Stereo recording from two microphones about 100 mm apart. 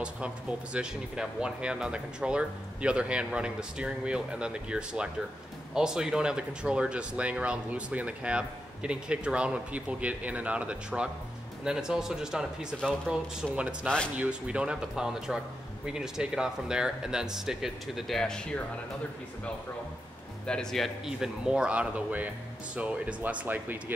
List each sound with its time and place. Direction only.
0.0 s speech: 10° right (ahead or behind); by 18.6 s 10° left (ahead or behind)
20.4 s speech: 5° left (ahead or behind); by 23.8 s 15° right (ahead or behind)